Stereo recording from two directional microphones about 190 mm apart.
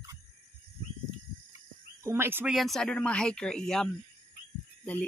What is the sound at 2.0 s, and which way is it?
Speech, 10° right (ahead or behind).